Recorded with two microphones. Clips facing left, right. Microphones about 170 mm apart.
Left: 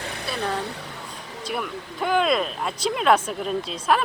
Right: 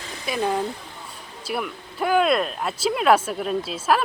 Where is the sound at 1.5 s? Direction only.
5° right (ahead or behind).